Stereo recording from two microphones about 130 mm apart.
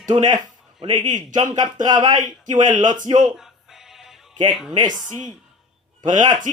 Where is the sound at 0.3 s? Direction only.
35° right (ahead or behind).